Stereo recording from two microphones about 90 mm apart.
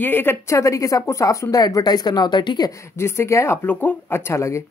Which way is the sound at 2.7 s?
30° left (ahead or behind).